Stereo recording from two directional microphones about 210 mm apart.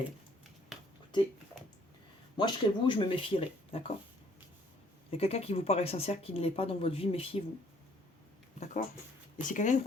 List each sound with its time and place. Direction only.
2.3 s speech: 20° left (ahead or behind)
5.1 s speech: 30° left (ahead or behind)
8.5 s speech: 35° left (ahead or behind)